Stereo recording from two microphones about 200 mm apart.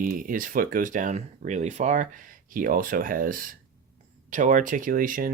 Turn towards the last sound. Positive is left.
turn(degrees=-45)  # may be behind; listen again after turning